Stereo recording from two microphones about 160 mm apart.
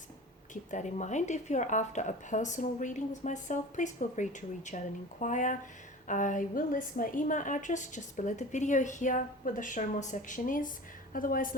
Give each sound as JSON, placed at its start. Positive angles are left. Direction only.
{"t": 0.5, "sound": "a woman's voice", "side_deg": 50}